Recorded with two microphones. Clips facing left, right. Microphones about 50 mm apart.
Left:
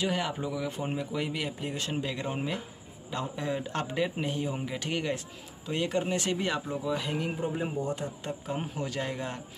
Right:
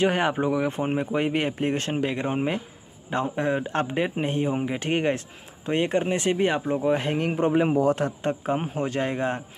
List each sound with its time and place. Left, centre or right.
0.0 s speech: right
8.2 s speech: right